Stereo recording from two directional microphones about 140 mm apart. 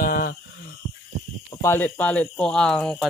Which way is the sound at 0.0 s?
90° left.